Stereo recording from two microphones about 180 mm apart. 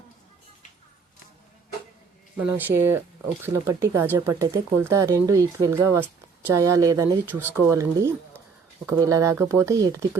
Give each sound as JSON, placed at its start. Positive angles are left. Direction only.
{"t": 2.4, "sound": "speech", "side_deg": -10}